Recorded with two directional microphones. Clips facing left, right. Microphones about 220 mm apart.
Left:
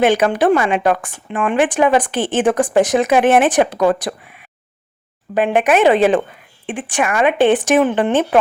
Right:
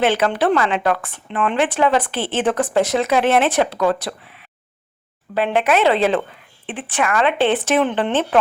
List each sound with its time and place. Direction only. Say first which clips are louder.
0.0 s speech: left 4 dB; 15° left (ahead or behind)